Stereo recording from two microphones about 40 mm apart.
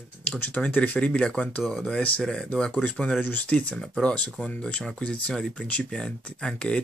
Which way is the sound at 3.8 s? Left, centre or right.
Centre.